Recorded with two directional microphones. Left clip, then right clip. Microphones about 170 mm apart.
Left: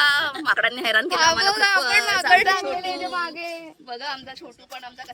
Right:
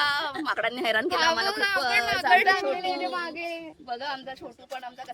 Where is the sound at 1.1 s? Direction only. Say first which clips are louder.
Left 5 dB; 40° left (ahead or behind).